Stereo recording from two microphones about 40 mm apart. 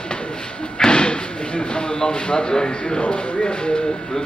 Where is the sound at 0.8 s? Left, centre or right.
Left.